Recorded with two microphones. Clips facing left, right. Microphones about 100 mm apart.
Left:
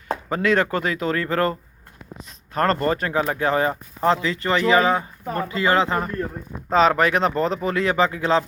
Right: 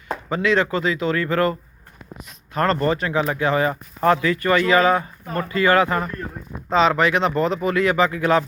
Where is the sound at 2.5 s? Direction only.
40° left (ahead or behind).